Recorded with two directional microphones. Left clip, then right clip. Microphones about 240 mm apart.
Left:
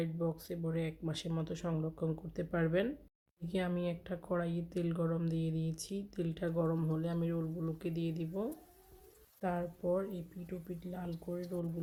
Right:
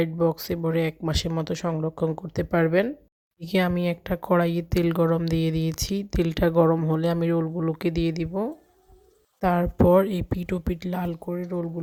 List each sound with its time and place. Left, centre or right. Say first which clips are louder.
0.0 s speech: right 15 dB; right